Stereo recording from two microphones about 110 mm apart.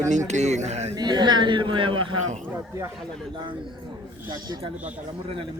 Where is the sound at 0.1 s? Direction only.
90° right.